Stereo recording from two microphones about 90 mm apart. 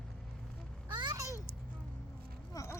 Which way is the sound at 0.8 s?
55° right (ahead or behind).